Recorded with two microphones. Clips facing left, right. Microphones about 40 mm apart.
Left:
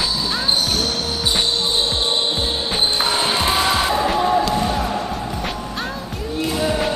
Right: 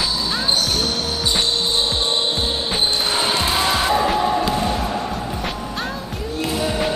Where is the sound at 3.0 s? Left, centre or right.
Centre.